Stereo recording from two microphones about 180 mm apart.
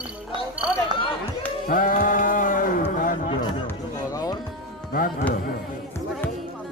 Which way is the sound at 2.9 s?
45° left (ahead or behind).